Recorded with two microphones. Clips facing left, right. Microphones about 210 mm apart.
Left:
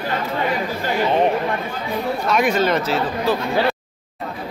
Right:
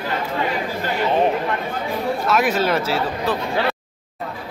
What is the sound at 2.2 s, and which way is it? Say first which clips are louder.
A man's voice: left 1 dB; 5° right (ahead or behind).